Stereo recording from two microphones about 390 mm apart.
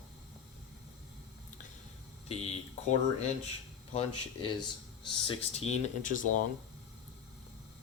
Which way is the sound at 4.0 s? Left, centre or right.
Centre.